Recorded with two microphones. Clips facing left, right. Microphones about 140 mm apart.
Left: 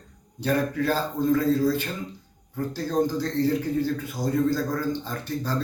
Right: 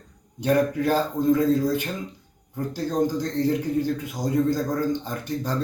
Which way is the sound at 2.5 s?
15° right (ahead or behind).